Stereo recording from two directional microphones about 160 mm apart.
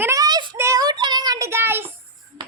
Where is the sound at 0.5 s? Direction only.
20° right (ahead or behind).